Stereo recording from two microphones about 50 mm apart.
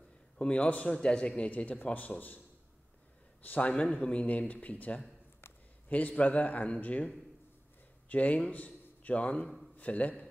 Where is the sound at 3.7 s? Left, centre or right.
Left.